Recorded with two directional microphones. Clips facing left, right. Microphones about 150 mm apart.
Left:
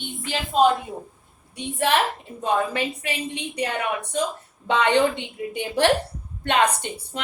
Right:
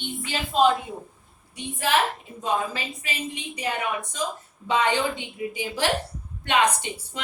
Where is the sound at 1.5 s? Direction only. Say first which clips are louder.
Left 2 dB; 60° left (ahead or behind).